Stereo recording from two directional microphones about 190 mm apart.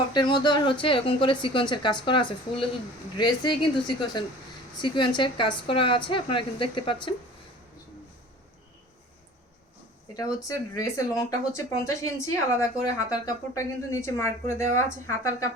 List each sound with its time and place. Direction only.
0.1 s speech: 25° left (ahead or behind)
10.2 s speech: 20° left (ahead or behind)